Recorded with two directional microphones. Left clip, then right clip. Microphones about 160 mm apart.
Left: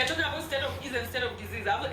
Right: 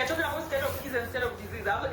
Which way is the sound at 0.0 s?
15° left (ahead or behind).